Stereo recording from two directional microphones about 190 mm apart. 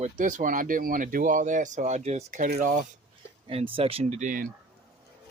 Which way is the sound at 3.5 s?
30° right (ahead or behind).